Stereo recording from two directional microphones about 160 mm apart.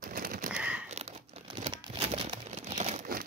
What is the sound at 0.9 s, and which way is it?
Crumpling, 40° right (ahead or behind).